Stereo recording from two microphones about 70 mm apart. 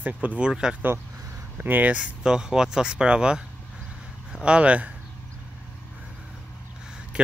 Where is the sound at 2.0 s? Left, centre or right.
Centre.